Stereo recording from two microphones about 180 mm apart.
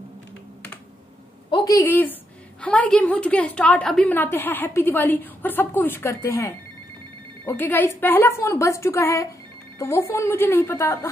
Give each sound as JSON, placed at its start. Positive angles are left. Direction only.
{"t": 1.5, "sound": "a woman's voice", "side_deg": 20}